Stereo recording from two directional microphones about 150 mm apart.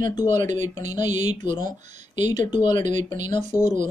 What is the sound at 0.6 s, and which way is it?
Speech, 50° right (ahead or behind).